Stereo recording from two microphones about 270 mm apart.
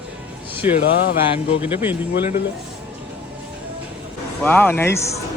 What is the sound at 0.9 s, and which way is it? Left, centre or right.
Speech, left.